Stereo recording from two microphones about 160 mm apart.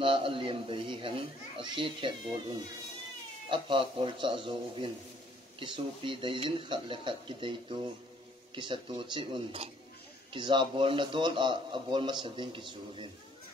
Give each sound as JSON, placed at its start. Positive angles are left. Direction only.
{"t": 0.0, "sound": "a man's voice", "side_deg": -35}
{"t": 3.4, "sound": "a man's voice", "side_deg": -30}